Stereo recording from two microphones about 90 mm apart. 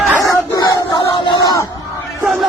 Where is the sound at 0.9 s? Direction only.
45° left (ahead or behind).